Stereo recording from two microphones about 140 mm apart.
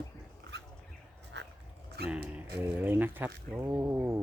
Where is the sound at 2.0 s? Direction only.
10° right (ahead or behind).